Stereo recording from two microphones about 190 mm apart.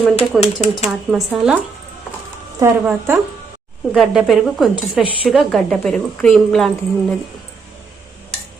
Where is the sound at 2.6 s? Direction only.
10° right (ahead or behind).